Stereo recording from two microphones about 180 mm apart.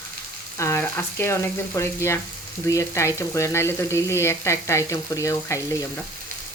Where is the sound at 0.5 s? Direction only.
15° left (ahead or behind).